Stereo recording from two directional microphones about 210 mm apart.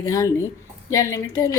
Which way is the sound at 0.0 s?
15° left (ahead or behind).